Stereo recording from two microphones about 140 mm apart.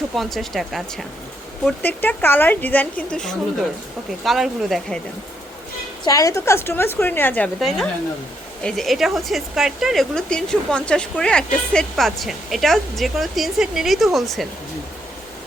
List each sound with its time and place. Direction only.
0.1 s a woman's voice: centre (ahead or behind)
1.8 s a woman's voice: 10° left (ahead or behind)
6.1 s speech: 25° left (ahead or behind)
8.6 s a woman's voice: centre (ahead or behind)